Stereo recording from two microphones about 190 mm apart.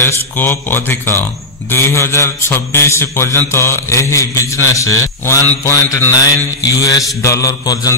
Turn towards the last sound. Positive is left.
turn(degrees=20)  # may be behind; listen again after turning